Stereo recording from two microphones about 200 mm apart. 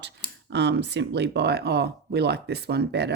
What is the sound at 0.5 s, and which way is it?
Speech, 60° right (ahead or behind).